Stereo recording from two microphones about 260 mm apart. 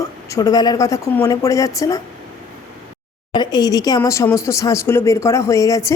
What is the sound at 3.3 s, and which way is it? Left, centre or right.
A woman's voice, centre.